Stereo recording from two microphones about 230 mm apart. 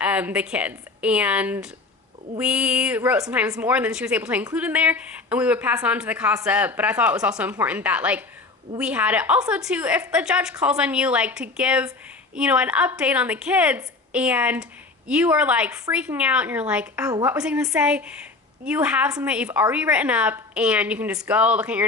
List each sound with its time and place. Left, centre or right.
0.0 s a woman's voice: centre
17.1 s speech: centre
17.3 s a woman's voice: centre